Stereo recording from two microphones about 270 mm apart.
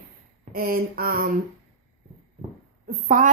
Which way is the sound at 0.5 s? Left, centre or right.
Right.